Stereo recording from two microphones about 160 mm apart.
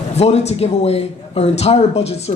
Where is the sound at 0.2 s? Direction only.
40° left (ahead or behind).